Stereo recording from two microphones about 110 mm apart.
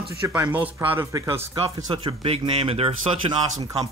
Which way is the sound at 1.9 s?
55° right (ahead or behind).